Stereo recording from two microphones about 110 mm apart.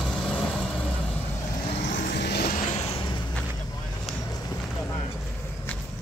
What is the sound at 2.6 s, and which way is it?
Vehicle, 90° left.